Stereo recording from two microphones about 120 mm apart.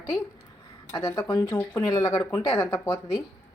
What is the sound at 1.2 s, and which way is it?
Speech, 35° left (ahead or behind).